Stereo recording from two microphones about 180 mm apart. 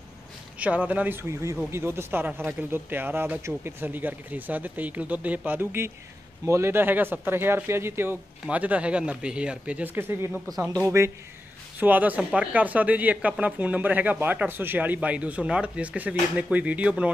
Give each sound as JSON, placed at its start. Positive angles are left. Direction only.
{"t": 0.6, "sound": "speech", "side_deg": -10}